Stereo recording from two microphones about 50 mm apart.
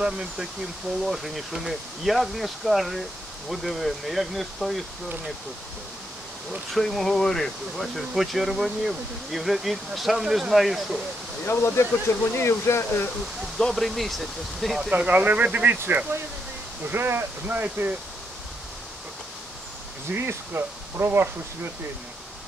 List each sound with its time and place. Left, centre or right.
0.0 s speech: centre
1.0 s speech: centre
6.7 s speech: centre
11.4 s speech: left
13.6 s speech: centre
14.8 s speech: centre
15.0 s speech: right
16.1 s speech: right
16.9 s speech: right
17.5 s speech: right
20.2 s speech: right